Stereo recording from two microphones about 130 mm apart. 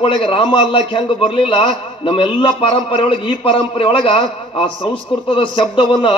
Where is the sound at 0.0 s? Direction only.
45° left (ahead or behind).